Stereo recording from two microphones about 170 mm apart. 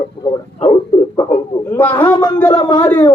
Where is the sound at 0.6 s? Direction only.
30° left (ahead or behind).